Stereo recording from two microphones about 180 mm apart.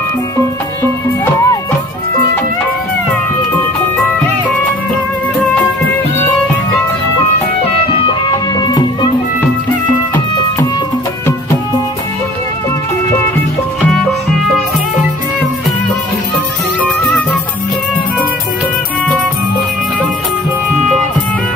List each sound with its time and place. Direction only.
1.2 s music: 20° left (ahead or behind)
8.0 s music: 25° left (ahead or behind)